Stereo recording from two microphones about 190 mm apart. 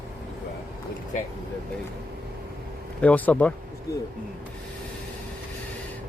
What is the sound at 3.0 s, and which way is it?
Speech, 10° left (ahead or behind).